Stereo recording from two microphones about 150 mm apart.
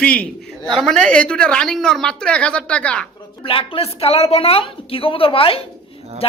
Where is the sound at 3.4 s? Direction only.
35° left (ahead or behind).